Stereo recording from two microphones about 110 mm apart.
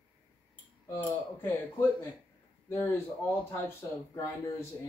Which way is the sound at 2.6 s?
20° left (ahead or behind).